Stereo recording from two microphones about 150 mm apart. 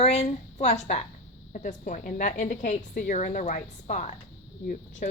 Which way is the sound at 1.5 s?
55° left (ahead or behind).